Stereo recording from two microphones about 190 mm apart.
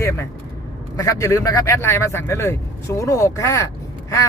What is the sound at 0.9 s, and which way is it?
Speech, 15° left (ahead or behind).